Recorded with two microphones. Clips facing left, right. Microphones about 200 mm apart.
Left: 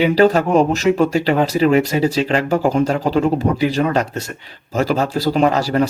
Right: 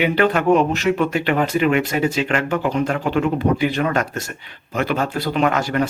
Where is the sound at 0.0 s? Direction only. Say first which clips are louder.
Left 4 dB; 35° left (ahead or behind).